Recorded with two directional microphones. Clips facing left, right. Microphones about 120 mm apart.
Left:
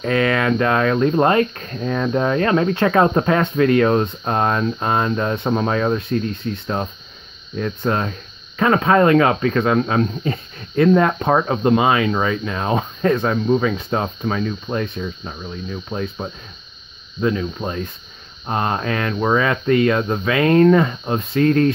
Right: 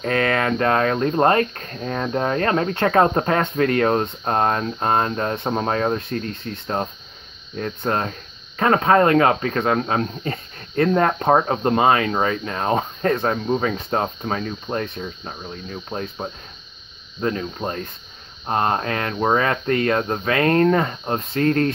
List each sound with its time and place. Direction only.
0.0 s speech: 40° right (ahead or behind)
7.5 s speech: 40° right (ahead or behind)
18.5 s speech: 35° right (ahead or behind)